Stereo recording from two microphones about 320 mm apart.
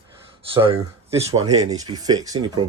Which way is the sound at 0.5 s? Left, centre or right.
Centre.